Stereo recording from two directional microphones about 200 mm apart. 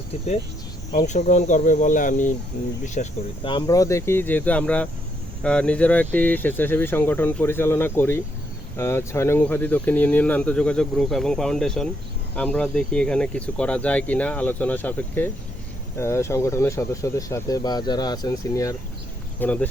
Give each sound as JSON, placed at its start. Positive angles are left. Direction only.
{"t": 0.9, "sound": "speech", "side_deg": 35}
{"t": 3.4, "sound": "speech", "side_deg": 20}